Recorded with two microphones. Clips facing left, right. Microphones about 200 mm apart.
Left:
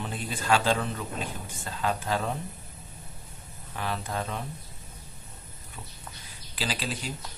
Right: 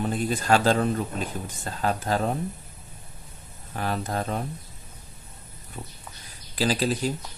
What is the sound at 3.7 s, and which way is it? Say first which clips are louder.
Speech: right 4 dB; 45° right (ahead or behind).